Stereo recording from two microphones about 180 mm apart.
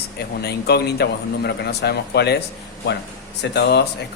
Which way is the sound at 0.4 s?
65° left (ahead or behind).